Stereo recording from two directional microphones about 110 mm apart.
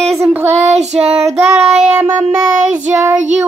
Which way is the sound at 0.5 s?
90° right.